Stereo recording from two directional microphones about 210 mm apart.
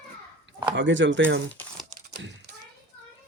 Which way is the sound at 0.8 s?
60° right (ahead or behind).